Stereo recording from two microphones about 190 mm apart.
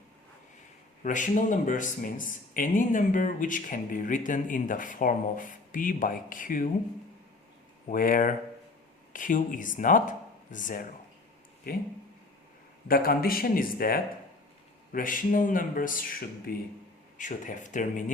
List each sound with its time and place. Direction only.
1.0 s speech: 40° left (ahead or behind)
7.9 s speech: 45° left (ahead or behind)
12.9 s speech: 50° left (ahead or behind)